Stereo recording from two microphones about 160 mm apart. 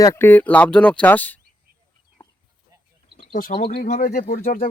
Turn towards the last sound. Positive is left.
turn(degrees=65)  # may be behind; listen again after turning